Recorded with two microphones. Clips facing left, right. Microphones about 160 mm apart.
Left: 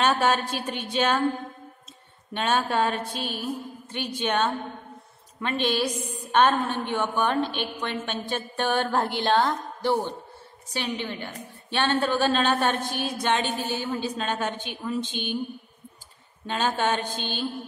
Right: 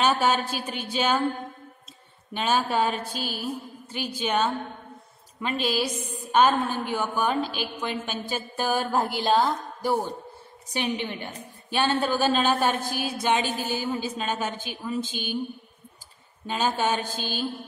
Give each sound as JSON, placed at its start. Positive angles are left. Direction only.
{"t": 0.0, "sound": "a woman's voice", "side_deg": -5}
{"t": 2.3, "sound": "a woman's voice", "side_deg": -5}
{"t": 11.7, "sound": "a woman's voice", "side_deg": -10}
{"t": 16.4, "sound": "a woman's voice", "side_deg": -5}